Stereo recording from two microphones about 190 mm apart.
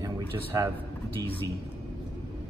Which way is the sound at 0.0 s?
15° right (ahead or behind).